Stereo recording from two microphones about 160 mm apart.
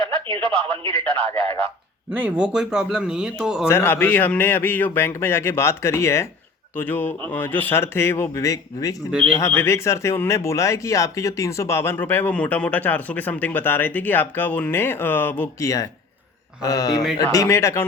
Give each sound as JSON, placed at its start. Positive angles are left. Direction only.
{"t": 0.0, "sound": "speech", "side_deg": -35}
{"t": 1.0, "sound": "speech", "side_deg": 10}
{"t": 2.0, "sound": "a man's voice", "side_deg": -10}
{"t": 3.7, "sound": "speech", "side_deg": 15}